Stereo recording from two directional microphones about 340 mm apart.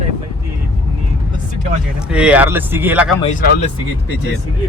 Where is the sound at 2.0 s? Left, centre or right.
Centre.